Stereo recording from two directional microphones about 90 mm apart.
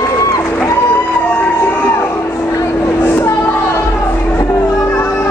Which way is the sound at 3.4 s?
30° left (ahead or behind).